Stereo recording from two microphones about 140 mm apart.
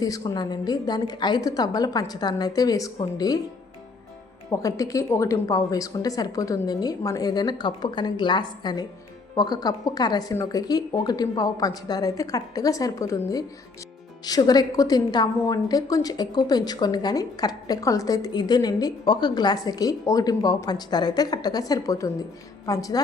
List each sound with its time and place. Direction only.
0.0 s a woman's voice: 30° left (ahead or behind)
4.5 s a woman's voice: 25° left (ahead or behind)